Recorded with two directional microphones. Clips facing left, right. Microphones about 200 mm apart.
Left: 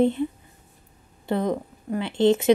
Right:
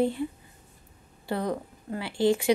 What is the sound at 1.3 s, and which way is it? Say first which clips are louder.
Speech: left 5 dB; 20° left (ahead or behind).